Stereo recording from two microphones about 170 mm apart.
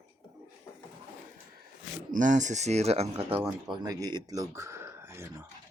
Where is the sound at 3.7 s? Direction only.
25° right (ahead or behind).